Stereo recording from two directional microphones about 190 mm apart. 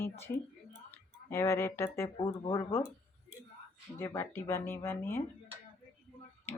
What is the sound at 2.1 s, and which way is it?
Speech, 25° left (ahead or behind).